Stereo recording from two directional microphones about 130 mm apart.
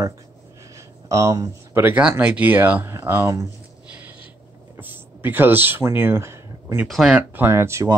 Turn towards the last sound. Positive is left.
turn(degrees=-20)  # may be behind; listen again after turning